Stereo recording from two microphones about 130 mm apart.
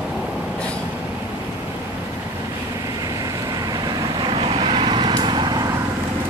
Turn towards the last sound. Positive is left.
turn(degrees=-35)  # may be behind; listen again after turning